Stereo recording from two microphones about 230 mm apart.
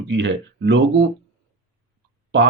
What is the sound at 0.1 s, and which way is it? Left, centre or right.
Speech, right.